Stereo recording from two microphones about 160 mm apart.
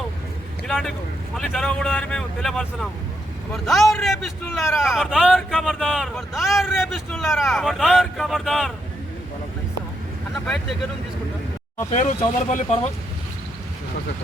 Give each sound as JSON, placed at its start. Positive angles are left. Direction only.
{"t": 0.7, "sound": "vehicle", "side_deg": 0}
{"t": 1.4, "sound": "a man's voice", "side_deg": 5}
{"t": 10.3, "sound": "a man's voice", "side_deg": 5}
{"t": 11.9, "sound": "speech", "side_deg": 50}